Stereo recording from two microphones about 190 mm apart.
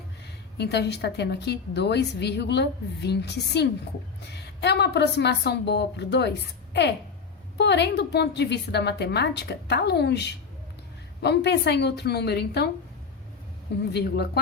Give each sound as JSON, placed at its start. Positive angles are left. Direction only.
{"t": 0.5, "sound": "a woman's voice", "side_deg": 60}
{"t": 13.9, "sound": "a woman's voice", "side_deg": 55}